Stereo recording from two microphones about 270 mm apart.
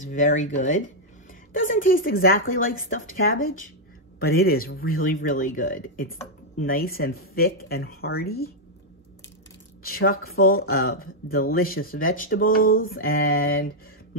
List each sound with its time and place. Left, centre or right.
0.1 s speech: left
9.8 s speech: left